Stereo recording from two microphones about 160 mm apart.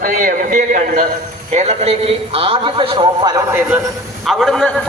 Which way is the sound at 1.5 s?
40° right (ahead or behind).